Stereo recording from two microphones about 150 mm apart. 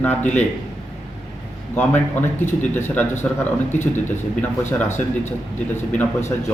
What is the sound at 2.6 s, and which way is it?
Speech, 10° left (ahead or behind).